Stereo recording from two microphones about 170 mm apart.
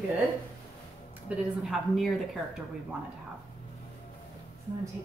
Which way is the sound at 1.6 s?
Centre (ahead or behind).